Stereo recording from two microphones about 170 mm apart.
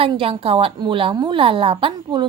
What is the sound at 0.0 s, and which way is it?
A woman's voice, 30° right (ahead or behind).